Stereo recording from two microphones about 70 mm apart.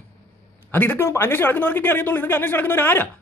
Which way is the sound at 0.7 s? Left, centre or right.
Left.